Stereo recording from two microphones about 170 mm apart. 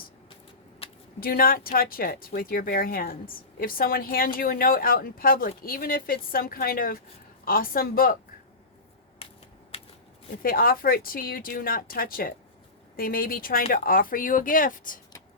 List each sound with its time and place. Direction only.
0.8 s a sound: 35° left (ahead or behind)
1.2 s speech: 60° left (ahead or behind)
10.4 s speech: 60° left (ahead or behind)